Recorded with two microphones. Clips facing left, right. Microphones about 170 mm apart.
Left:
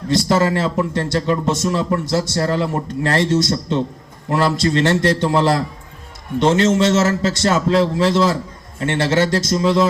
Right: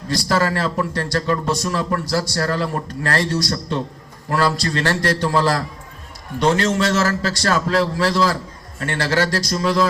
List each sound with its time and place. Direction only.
0.1 s speech: 20° left (ahead or behind)